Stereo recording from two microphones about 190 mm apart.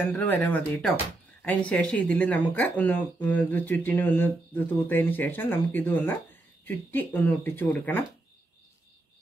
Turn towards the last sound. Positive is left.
turn(degrees=10)  # may be behind; listen again after turning